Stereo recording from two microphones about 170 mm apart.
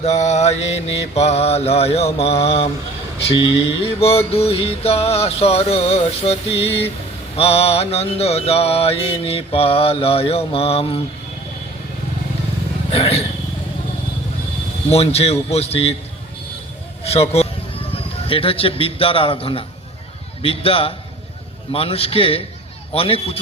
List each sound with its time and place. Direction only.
0.0 s mantra: 40° left (ahead or behind)
12.9 s mantra: 35° left (ahead or behind)
14.8 s mantra: 35° left (ahead or behind)
17.0 s speech: 35° left (ahead or behind)
20.4 s mantra: 35° left (ahead or behind)